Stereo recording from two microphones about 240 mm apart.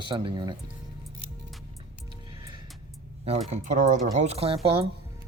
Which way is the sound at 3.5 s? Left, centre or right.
Right.